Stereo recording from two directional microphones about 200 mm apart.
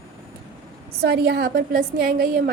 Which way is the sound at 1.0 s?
55° right (ahead or behind).